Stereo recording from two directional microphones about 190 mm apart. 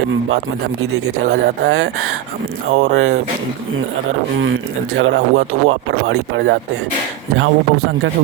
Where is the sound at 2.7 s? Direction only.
35° right (ahead or behind).